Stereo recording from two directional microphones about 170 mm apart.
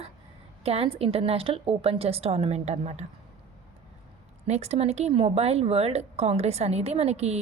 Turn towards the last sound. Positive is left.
turn(degrees=-40)  # may be behind; listen again after turning